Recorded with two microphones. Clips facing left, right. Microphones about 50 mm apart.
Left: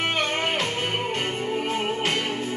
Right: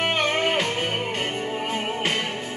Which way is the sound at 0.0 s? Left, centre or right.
Centre.